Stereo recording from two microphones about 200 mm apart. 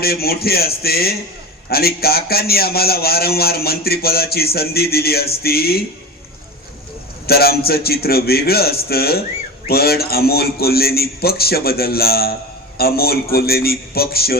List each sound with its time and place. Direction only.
0.0 s a man's voice: 50° left (ahead or behind)
7.3 s a man's voice: 50° left (ahead or behind)